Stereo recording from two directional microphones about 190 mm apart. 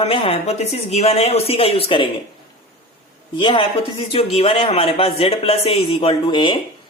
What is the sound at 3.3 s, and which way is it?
Speech, 25° left (ahead or behind).